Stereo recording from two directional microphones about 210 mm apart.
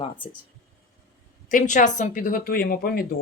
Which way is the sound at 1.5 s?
35° left (ahead or behind).